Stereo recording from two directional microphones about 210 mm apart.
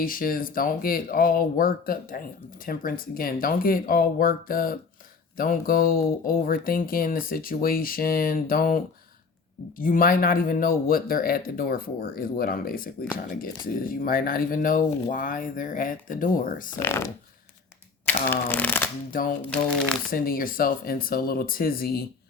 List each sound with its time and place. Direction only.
0.0 s speech: 40° left (ahead or behind)
16.8 s speech: 10° left (ahead or behind)
20.1 s speech: 45° left (ahead or behind)